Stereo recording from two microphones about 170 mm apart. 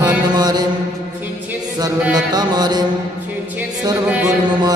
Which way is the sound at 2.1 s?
25° right (ahead or behind).